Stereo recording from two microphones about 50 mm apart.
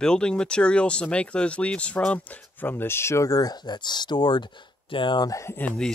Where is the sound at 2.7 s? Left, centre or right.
Left.